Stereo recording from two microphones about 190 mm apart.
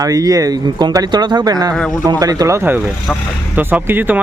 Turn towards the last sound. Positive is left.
turn(degrees=-10)  # may be behind; listen again after turning